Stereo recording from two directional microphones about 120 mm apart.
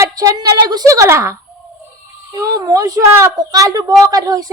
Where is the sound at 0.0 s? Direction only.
30° right (ahead or behind).